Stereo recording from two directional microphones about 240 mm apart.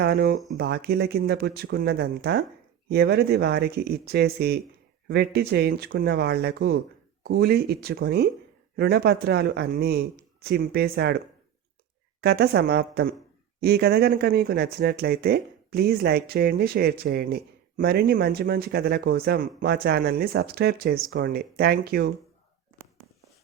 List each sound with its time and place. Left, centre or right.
0.0 s speech: right
12.2 s speech: right